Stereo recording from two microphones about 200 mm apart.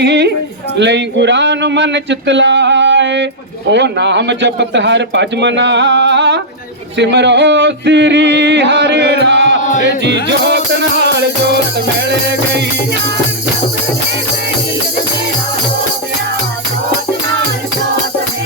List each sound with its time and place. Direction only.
0.0 s music: 60° right (ahead or behind)
9.6 s chant: 35° left (ahead or behind)
9.8 s music: 60° right (ahead or behind)